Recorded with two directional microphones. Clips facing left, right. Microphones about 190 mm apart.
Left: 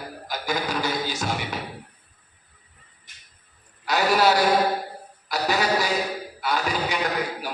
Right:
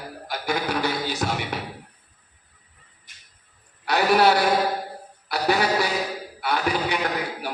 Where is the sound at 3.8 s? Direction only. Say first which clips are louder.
Right 2 dB; 60° right (ahead or behind).